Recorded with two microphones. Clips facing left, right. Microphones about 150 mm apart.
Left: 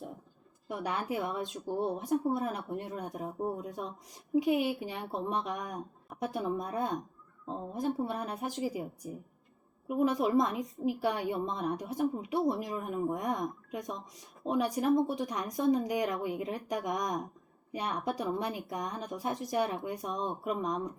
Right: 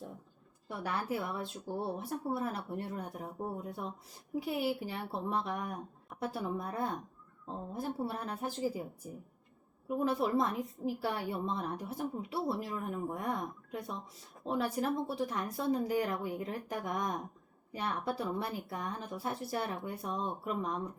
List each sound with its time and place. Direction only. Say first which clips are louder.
0.7 s speech: left 2 dB; 15° left (ahead or behind)
9.9 s speech: left 4 dB; 15° left (ahead or behind)